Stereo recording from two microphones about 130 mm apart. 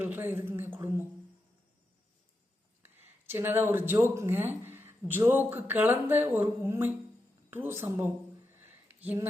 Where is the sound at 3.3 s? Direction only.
15° right (ahead or behind).